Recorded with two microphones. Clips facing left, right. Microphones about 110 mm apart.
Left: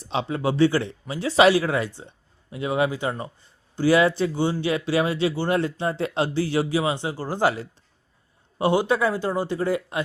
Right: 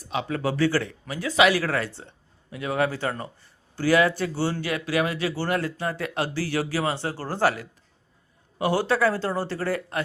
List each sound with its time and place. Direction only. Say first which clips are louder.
0.0 s speech: left 2 dB; 25° left (ahead or behind)
1.6 s a man's voice: left 2 dB; 15° left (ahead or behind)